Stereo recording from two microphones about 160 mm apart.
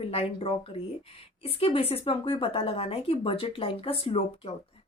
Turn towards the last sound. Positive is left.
turn(degrees=35)  # may be behind; listen again after turning